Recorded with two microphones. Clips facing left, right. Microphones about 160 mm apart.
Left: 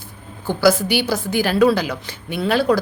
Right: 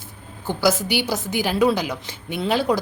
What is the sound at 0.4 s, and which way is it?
A woman's voice, 20° right (ahead or behind).